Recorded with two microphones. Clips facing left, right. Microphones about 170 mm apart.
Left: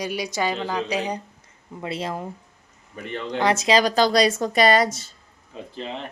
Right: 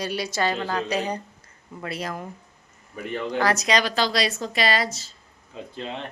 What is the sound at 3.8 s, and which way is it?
A woman's voice, 45° left (ahead or behind).